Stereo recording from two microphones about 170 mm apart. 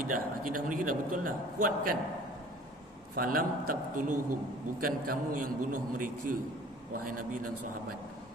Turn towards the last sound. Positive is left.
turn(degrees=-55)  # may be behind; listen again after turning